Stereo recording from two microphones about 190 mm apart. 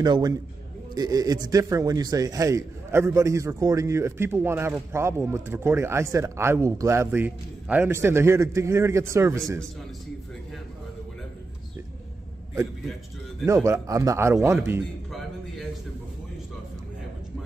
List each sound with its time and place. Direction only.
0.0 s a man's voice: 20° right (ahead or behind)
13.5 s a man's voice: 15° right (ahead or behind)